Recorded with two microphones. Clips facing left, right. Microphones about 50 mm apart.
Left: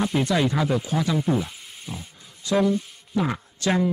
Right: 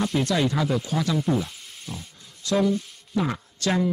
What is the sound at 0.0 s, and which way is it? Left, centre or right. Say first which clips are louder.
Speech: left 1 dB; centre.